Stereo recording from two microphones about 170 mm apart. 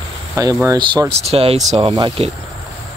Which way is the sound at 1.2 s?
35° right (ahead or behind).